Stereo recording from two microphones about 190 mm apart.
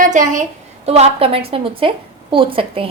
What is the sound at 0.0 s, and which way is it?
A woman's voice, 40° right (ahead or behind).